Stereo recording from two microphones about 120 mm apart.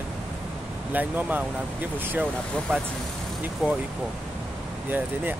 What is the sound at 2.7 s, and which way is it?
Speech, 15° right (ahead or behind).